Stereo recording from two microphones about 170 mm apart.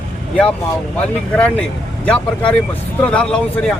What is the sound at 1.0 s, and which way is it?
Speech, 5° left (ahead or behind).